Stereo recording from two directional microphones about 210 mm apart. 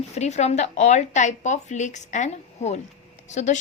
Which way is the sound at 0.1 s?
30° left (ahead or behind).